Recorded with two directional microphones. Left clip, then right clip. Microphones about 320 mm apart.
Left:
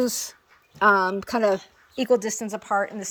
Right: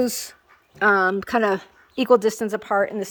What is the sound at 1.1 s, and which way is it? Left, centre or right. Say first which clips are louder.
Speech: right 1 dB; centre.